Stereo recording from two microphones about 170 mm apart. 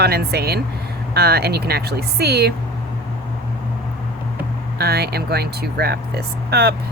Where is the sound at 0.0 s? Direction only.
70° right (ahead or behind).